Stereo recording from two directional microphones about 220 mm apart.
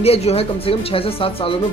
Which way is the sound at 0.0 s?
30° left (ahead or behind).